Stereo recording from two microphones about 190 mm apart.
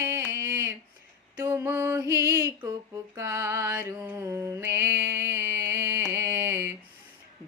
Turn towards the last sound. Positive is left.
turn(degrees=-15)  # may be behind; listen again after turning